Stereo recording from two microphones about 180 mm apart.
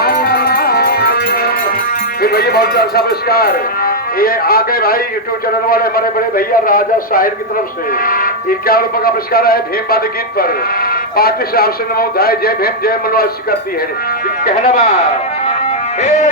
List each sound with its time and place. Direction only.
0.0 s music: 60° left (ahead or behind)
2.2 s a man's voice: 60° left (ahead or behind)
16.0 s speech: 40° left (ahead or behind)